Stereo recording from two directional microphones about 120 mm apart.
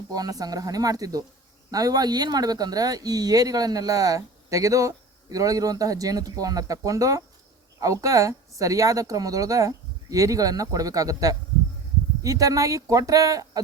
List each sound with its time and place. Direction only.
0.1 s a woman's voice: 30° right (ahead or behind)